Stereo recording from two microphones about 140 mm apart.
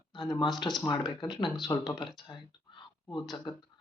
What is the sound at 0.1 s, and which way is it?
Speech, 30° left (ahead or behind).